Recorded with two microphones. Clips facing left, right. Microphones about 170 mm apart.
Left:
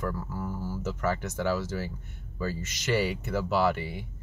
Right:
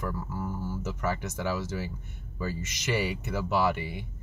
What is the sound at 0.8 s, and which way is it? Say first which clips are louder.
Speech: left 3 dB; 15° right (ahead or behind).